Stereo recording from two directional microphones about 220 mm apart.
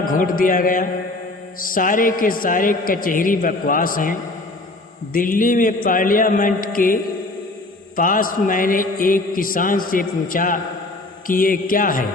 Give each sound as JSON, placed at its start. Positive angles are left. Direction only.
{"t": 0.1, "sound": "a man's voice", "side_deg": 40}